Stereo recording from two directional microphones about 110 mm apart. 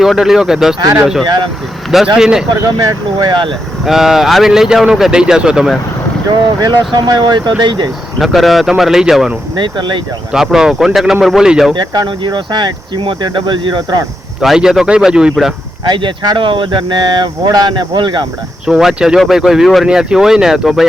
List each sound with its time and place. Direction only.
0.0 s speech: 5° right (ahead or behind)
2.1 s speech: 5° right (ahead or behind)
2.7 s speech: 40° right (ahead or behind)
3.8 s speech: 5° right (ahead or behind)
6.2 s speech: 40° right (ahead or behind)
8.2 s speech: centre (ahead or behind)
9.6 s speech: 45° right (ahead or behind)
10.3 s speech: 5° right (ahead or behind)
11.7 s speech: 40° right (ahead or behind)
14.4 s speech: 5° right (ahead or behind)
15.9 s speech: 45° right (ahead or behind)
18.6 s speech: 5° right (ahead or behind)